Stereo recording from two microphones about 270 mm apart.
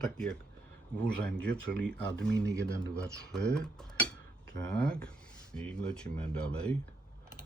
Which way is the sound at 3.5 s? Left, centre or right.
Centre.